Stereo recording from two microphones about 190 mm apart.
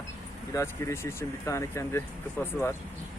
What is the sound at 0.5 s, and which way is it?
Speech, 15° left (ahead or behind).